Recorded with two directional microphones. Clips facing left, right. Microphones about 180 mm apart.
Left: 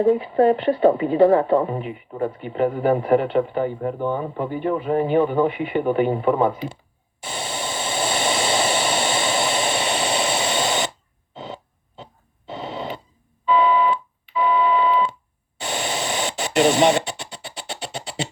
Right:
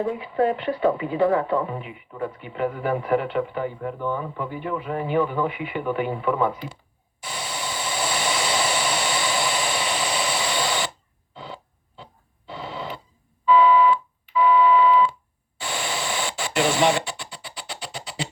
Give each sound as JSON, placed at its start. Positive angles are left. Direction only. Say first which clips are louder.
{"t": 0.0, "sound": "speech", "louder": "left 6 dB", "side_deg": 30}
{"t": 7.2, "sound": "vehicle", "louder": "left 3 dB", "side_deg": 25}
{"t": 11.3, "sound": "a sound", "louder": "left 4 dB", "side_deg": 20}
{"t": 12.5, "sound": "radio", "louder": "left 3 dB", "side_deg": 20}
{"t": 13.4, "sound": "telephone dialing", "louder": "right 2 dB", "side_deg": 20}
{"t": 15.5, "sound": "radio", "louder": "left 3 dB", "side_deg": 20}